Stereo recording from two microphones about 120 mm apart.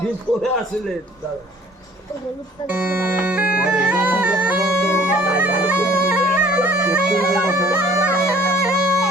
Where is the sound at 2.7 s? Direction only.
15° right (ahead or behind).